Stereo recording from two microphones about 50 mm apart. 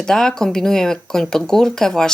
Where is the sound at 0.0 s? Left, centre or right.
Centre.